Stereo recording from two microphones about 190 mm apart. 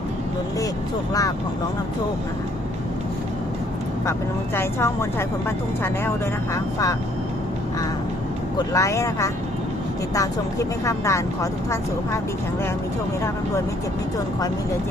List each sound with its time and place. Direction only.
4.5 s speech: 15° left (ahead or behind)
8.5 s speech: 15° left (ahead or behind)